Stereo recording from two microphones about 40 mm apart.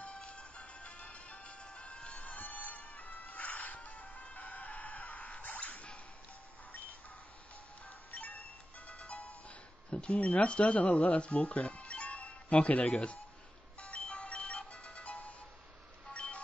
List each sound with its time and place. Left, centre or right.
0.0 s music: left
8.1 s music: left
9.8 s speech: left
13.7 s music: left
16.1 s a sound: left